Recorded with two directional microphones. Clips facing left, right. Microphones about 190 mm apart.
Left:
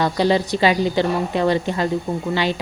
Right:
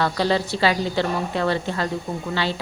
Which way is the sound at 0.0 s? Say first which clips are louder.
Left 3 dB; 15° left (ahead or behind).